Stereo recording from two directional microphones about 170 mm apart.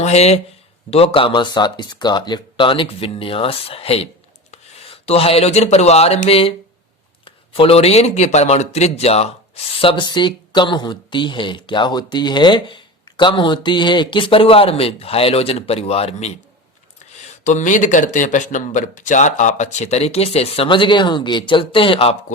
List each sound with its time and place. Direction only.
0.0 s speech: 40° left (ahead or behind)
17.4 s speech: 45° left (ahead or behind)